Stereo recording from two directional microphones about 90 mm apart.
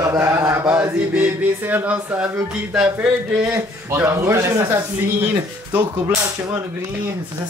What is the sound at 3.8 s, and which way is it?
Speech, 30° right (ahead or behind).